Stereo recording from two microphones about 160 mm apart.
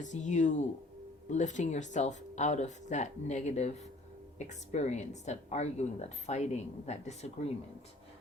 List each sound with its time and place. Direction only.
0.0 s a woman's voice: 50° left (ahead or behind)